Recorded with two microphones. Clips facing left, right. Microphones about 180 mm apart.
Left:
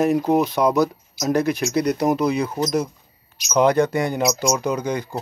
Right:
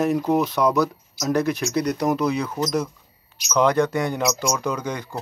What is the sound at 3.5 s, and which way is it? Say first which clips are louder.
Speech: left 2 dB; 5° left (ahead or behind).